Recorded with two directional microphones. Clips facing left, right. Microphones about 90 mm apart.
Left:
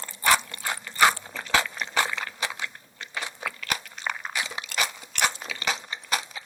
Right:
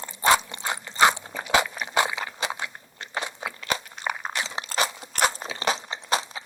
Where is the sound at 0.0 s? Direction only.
20° right (ahead or behind).